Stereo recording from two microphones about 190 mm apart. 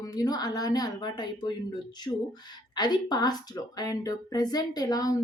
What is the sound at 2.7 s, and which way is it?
Speech, 20° left (ahead or behind).